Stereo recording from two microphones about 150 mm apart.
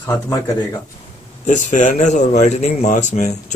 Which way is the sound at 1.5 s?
55° left (ahead or behind).